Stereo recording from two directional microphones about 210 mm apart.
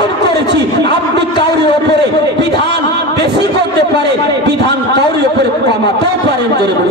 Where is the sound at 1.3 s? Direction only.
25° left (ahead or behind).